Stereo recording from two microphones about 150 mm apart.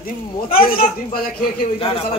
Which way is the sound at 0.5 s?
40° left (ahead or behind).